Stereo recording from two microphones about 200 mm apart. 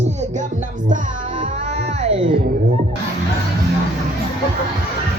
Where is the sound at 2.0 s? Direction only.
30° right (ahead or behind).